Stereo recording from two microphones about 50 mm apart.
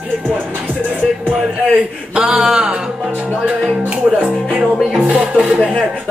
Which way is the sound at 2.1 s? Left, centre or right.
Centre.